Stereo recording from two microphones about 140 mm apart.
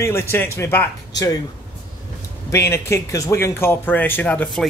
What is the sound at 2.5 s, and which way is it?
Speech, 20° left (ahead or behind).